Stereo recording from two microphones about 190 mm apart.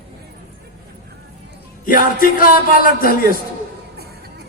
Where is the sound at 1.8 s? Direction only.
45° left (ahead or behind).